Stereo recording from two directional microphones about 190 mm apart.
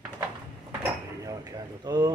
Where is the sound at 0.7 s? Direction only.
20° right (ahead or behind).